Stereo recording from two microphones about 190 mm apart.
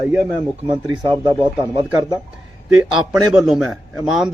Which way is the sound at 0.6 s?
25° right (ahead or behind).